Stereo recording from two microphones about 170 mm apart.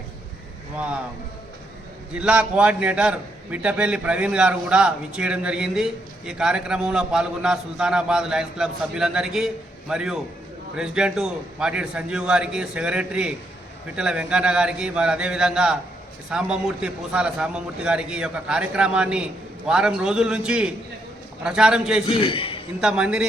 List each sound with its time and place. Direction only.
0.8 s speech: 5° right (ahead or behind)
2.1 s a man's voice: 5° right (ahead or behind)
22.1 s a man's voice: 30° left (ahead or behind)
22.8 s a man's voice: 5° right (ahead or behind)